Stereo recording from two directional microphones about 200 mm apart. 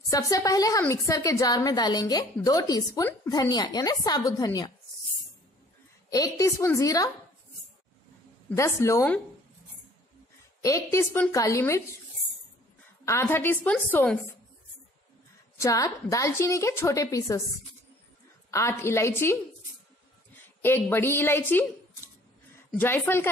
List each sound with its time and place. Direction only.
0.1 s a woman's voice: 15° left (ahead or behind)
6.0 s a woman's voice: 15° left (ahead or behind)
8.5 s a woman's voice: 15° left (ahead or behind)
10.6 s a woman's voice: 15° left (ahead or behind)
13.0 s a woman's voice: 15° left (ahead or behind)
15.6 s a woman's voice: 15° left (ahead or behind)
18.5 s a woman's voice: 15° left (ahead or behind)
20.6 s a woman's voice: 10° left (ahead or behind)
22.7 s a woman's voice: 10° left (ahead or behind)